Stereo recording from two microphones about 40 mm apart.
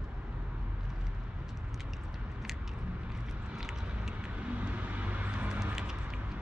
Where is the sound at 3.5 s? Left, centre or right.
Centre.